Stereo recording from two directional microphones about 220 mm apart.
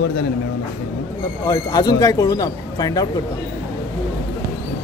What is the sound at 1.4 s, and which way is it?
Speech, 15° left (ahead or behind).